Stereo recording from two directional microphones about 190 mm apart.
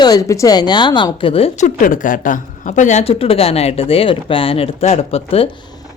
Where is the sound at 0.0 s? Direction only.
20° left (ahead or behind).